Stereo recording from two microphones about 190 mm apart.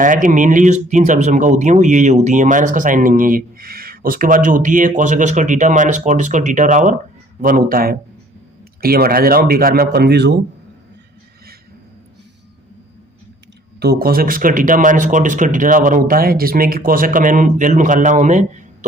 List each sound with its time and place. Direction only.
0.0 s speech: 45° right (ahead or behind); by 10.4 s 60° right (ahead or behind)
13.7 s speech: 55° right (ahead or behind); by 18.9 s 40° right (ahead or behind)